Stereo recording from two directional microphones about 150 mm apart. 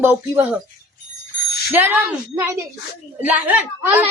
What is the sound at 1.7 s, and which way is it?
A woman's voice, 10° right (ahead or behind).